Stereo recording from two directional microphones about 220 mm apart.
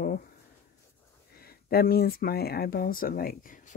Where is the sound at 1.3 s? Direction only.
45° left (ahead or behind).